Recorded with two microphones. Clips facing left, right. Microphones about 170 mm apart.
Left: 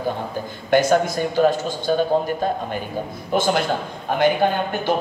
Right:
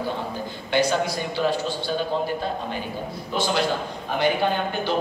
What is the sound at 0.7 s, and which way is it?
A man's voice, 50° left (ahead or behind).